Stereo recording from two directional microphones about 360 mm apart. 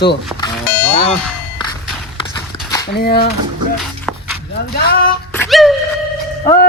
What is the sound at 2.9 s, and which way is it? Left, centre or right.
Speech, left.